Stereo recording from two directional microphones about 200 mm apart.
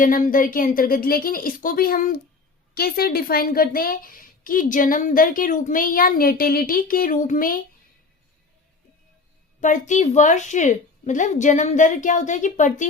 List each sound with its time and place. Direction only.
0.0 s a woman's voice: 45° left (ahead or behind)
9.6 s a woman's voice: 40° left (ahead or behind)